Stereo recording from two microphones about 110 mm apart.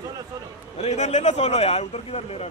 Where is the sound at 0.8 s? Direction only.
90° left; by 2.5 s 70° left (ahead or behind).